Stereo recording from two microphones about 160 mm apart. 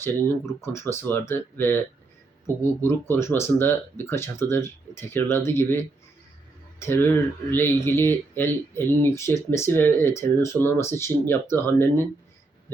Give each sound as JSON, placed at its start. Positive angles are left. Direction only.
{"t": 0.0, "sound": "speech", "side_deg": 15}
{"t": 2.8, "sound": "speech", "side_deg": 15}